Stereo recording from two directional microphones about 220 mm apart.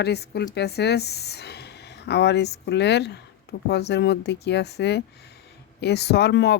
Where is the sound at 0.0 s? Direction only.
50° left (ahead or behind).